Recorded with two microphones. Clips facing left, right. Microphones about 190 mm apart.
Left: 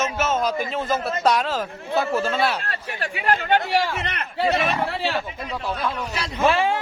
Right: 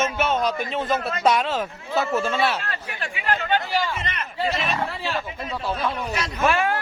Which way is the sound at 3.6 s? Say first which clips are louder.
Left 3 dB; 70° left (ahead or behind).